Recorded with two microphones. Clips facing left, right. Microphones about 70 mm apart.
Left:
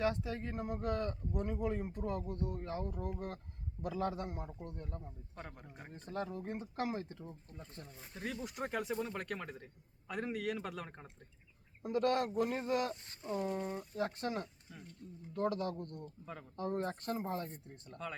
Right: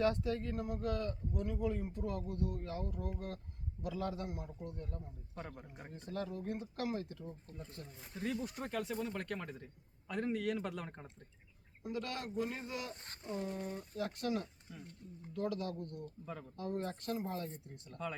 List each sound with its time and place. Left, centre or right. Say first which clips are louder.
0.0 s a man's voice: right 2 dB; centre; by 5.4 s left
5.6 s speech: even; centre
5.9 s speech: left 1 dB; left
7.9 s speech: right 3 dB; centre
8.4 s speech: left 2 dB; centre
9.0 s speech: even; centre
11.8 s a man's voice: left 9 dB; left
13.2 s speech: left 3 dB; left
13.5 s a man's voice: left 3 dB; left
16.2 s speech: right 2 dB; centre
16.6 s a man's voice: left 3 dB; left